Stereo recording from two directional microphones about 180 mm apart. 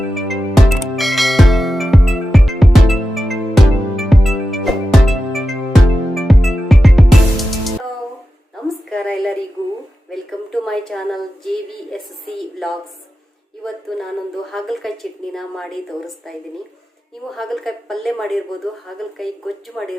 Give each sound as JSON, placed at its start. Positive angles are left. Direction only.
{"t": 0.1, "sound": "music", "side_deg": 0}
{"t": 8.9, "sound": "a sound", "side_deg": 5}
{"t": 13.7, "sound": "speech", "side_deg": 0}
{"t": 17.3, "sound": "speech", "side_deg": 0}